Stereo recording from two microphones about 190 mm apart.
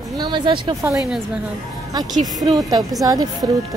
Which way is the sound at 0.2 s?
25° right (ahead or behind).